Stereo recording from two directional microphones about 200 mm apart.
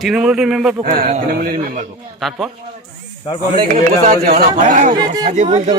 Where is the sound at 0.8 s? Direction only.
45° right (ahead or behind).